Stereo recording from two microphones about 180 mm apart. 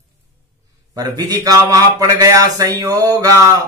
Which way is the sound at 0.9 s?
20° right (ahead or behind).